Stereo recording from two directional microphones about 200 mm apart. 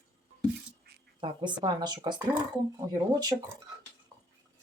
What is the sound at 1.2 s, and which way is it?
Speech, 20° right (ahead or behind).